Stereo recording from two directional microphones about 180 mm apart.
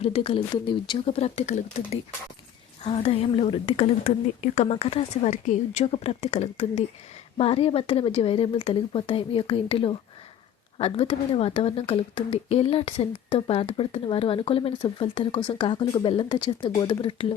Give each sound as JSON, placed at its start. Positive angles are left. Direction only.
{"t": 0.0, "sound": "a woman's voice", "side_deg": 35}
{"t": 4.0, "sound": "a woman's voice", "side_deg": 45}